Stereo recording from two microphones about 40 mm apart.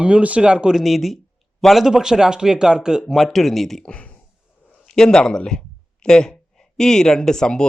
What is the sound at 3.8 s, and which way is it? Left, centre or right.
Speech, left.